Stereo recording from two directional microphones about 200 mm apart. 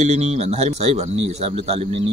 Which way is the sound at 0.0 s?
35° right (ahead or behind).